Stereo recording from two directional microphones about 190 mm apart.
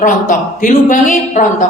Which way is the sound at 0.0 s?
45° left (ahead or behind).